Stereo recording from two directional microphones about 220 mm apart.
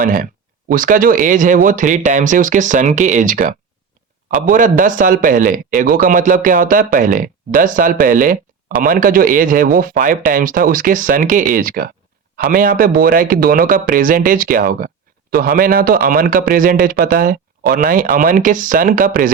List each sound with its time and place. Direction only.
0.0 s a man's voice: 40° right (ahead or behind)
4.5 s a man's voice: 35° right (ahead or behind)